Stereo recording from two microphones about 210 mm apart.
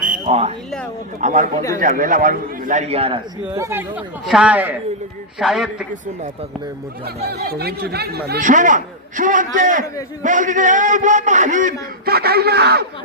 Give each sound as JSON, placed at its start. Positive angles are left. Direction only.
{"t": 0.0, "sound": "a sound", "side_deg": -35}
{"t": 1.2, "sound": "a man's voice", "side_deg": -35}
{"t": 3.5, "sound": "a man's voice", "side_deg": -10}
{"t": 7.3, "sound": "a man's voice", "side_deg": -50}